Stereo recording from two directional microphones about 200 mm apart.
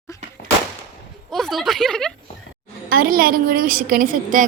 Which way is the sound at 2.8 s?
50° right (ahead or behind).